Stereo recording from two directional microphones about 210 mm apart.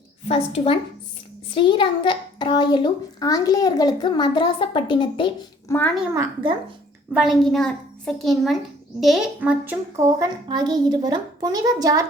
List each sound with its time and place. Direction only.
0.3 s a child's voice: 30° left (ahead or behind)
7.1 s a child's voice: centre (ahead or behind)
10.2 s a child's voice: 20° right (ahead or behind)